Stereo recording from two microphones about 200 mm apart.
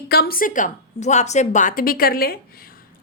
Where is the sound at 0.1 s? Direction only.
50° left (ahead or behind).